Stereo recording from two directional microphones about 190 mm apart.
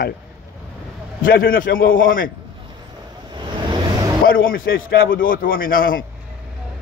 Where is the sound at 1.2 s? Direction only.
50° left (ahead or behind).